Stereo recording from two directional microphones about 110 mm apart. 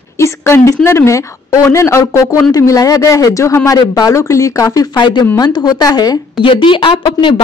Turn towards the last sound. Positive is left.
turn(degrees=45)  # may be behind; listen again after turning